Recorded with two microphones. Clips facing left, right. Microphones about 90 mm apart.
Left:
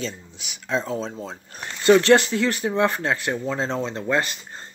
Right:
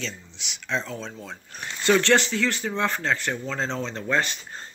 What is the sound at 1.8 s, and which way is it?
Speech, 20° left (ahead or behind).